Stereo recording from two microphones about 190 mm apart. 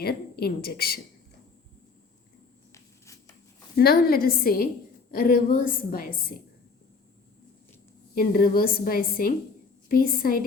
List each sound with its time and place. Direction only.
0.0 s speech: 55° left (ahead or behind)
2.7 s a sound: 15° left (ahead or behind)
3.8 s a woman's voice: 50° left (ahead or behind)
8.1 s a woman's voice: 50° left (ahead or behind)